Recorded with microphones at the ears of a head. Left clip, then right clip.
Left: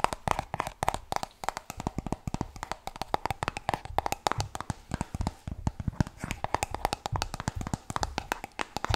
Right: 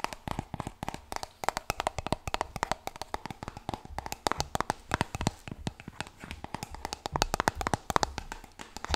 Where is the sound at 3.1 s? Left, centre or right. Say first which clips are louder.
Left 8 dB; left.